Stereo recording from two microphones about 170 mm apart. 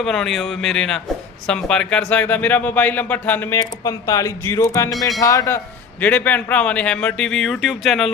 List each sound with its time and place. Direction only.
0.0 s speech: centre (ahead or behind); by 4.9 s 15° left (ahead or behind)
4.9 s speech: centre (ahead or behind)
5.2 s speech: 20° left (ahead or behind)
6.0 s speech: 10° left (ahead or behind)